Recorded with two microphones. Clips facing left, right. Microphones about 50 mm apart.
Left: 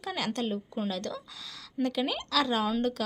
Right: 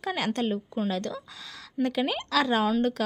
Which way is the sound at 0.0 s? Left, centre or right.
Right.